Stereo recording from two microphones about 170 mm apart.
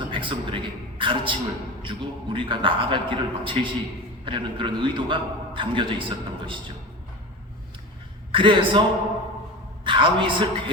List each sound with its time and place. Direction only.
0.1 s a man's voice: 30° right (ahead or behind)
8.3 s a man's voice: 30° right (ahead or behind)
9.8 s a woman's voice: 30° right (ahead or behind)